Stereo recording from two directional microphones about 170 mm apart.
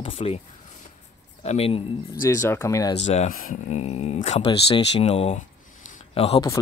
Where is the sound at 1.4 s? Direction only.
35° left (ahead or behind).